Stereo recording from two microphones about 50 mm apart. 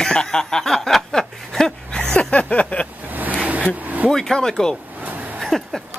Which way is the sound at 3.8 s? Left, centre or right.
Right.